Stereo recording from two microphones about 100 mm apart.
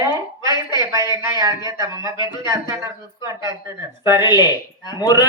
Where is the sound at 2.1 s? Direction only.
50° left (ahead or behind).